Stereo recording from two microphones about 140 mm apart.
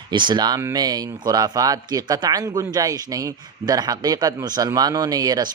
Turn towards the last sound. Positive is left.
turn(degrees=-25)  # may be behind; listen again after turning